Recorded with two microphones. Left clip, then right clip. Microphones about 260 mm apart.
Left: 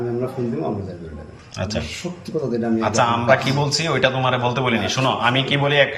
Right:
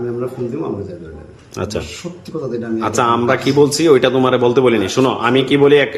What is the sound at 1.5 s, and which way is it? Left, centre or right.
Speech, centre.